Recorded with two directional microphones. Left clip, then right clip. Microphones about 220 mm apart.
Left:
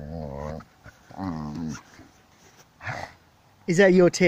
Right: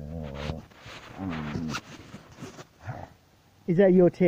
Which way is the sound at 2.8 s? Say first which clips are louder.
Left 9 dB; 10° left (ahead or behind).